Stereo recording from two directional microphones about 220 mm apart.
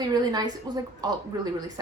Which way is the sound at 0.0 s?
20° right (ahead or behind).